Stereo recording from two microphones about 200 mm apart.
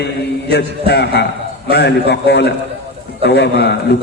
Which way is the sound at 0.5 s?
55° left (ahead or behind).